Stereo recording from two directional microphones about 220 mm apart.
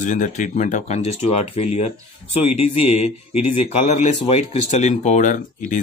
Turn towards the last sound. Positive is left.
turn(degrees=35)  # may be behind; listen again after turning